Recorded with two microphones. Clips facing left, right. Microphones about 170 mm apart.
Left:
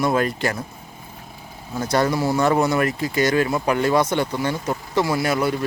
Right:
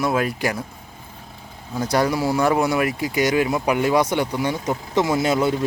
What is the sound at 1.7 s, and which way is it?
Speech, 10° right (ahead or behind).